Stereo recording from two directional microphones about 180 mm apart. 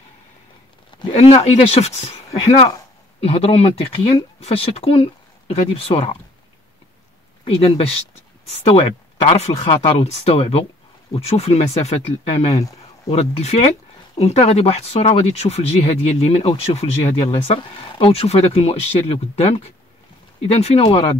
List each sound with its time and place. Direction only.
1.1 s speech: 35° left (ahead or behind)
7.4 s speech: 30° left (ahead or behind)